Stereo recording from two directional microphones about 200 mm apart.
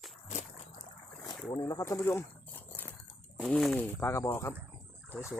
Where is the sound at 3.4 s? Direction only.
Centre (ahead or behind).